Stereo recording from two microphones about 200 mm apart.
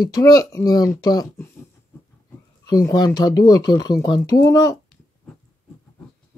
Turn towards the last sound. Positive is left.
turn(degrees=15)  # may be behind; listen again after turning